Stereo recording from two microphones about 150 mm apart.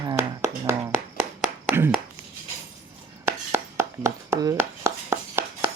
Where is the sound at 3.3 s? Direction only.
15° right (ahead or behind).